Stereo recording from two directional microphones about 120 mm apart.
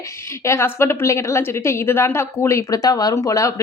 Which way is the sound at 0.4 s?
20° left (ahead or behind).